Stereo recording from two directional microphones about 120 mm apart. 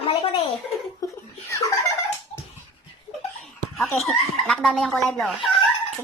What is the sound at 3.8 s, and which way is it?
Speech, centre (ahead or behind).